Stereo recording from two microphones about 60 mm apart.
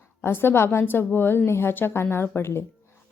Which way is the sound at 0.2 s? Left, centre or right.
Left.